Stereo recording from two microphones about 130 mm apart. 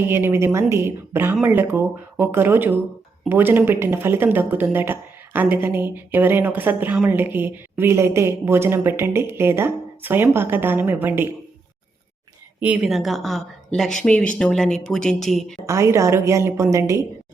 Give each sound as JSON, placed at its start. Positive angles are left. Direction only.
{"t": 0.1, "sound": "speech", "side_deg": -20}
{"t": 12.5, "sound": "speech", "side_deg": -10}
{"t": 15.6, "sound": "a woman's voice", "side_deg": -20}